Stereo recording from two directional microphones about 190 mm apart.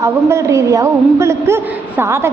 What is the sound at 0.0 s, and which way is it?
A man's voice, 15° right (ahead or behind).